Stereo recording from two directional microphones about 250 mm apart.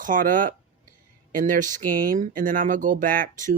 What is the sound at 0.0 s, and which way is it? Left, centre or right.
Speech, right.